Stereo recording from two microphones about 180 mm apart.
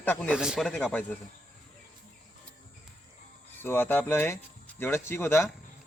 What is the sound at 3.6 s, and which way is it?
A man's voice, 10° left (ahead or behind).